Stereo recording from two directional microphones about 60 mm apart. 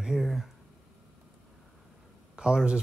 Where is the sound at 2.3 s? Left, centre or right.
Centre.